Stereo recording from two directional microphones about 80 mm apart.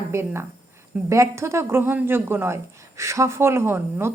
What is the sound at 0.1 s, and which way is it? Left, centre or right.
A woman's voice, right.